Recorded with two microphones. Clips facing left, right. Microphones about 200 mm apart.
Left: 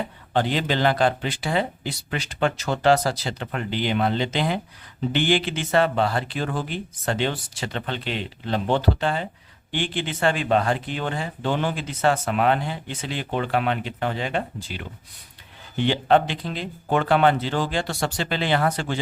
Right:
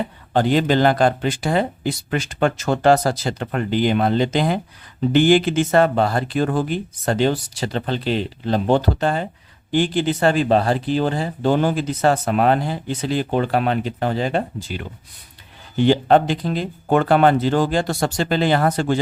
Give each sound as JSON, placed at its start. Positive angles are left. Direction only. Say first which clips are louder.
{"t": 0.3, "sound": "speech", "louder": "right 6 dB", "side_deg": -45}
{"t": 15.8, "sound": "speech", "louder": "right 5 dB", "side_deg": -40}